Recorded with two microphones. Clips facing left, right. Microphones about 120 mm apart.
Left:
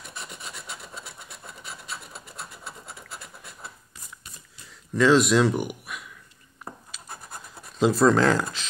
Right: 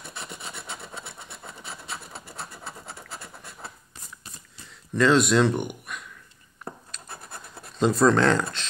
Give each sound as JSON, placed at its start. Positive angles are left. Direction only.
{"t": 0.1, "sound": "filing", "side_deg": -30}
{"t": 4.6, "sound": "speech", "side_deg": 0}
{"t": 6.9, "sound": "scratch", "side_deg": 5}
{"t": 7.7, "sound": "speech", "side_deg": 5}